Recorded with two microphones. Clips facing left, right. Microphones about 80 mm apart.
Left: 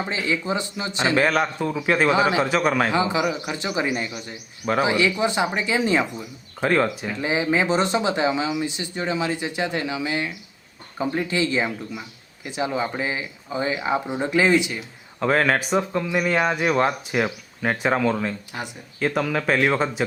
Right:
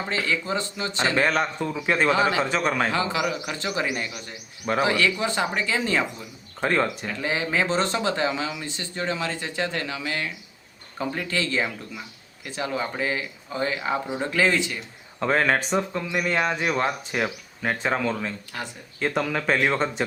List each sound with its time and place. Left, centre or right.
0.0 s speech: centre
1.1 s speech: centre
2.0 s speech: centre
2.9 s speech: centre
4.6 s speech: centre
4.9 s speech: centre
6.7 s speech: centre
7.1 s speech: centre
15.2 s speech: centre